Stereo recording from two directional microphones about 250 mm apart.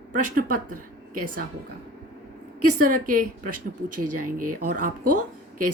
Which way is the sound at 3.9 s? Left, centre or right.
Right.